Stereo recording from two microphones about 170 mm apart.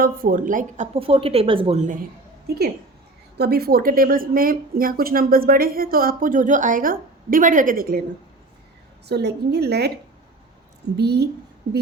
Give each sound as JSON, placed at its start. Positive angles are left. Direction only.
{"t": 0.0, "sound": "a woman's voice", "side_deg": -55}
{"t": 0.9, "sound": "a woman's voice", "side_deg": -35}
{"t": 3.3, "sound": "speech", "side_deg": -70}
{"t": 9.0, "sound": "a woman's voice", "side_deg": -75}
{"t": 10.9, "sound": "a woman's voice", "side_deg": -75}